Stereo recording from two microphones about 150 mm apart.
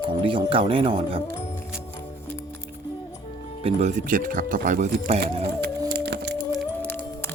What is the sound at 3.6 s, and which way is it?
Speech, 50° right (ahead or behind).